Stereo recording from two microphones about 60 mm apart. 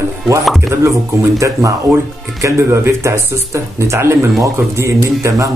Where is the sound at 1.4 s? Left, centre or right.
Right.